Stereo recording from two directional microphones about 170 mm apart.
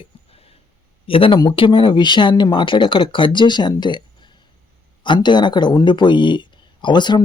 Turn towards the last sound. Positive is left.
turn(degrees=25)  # may be behind; listen again after turning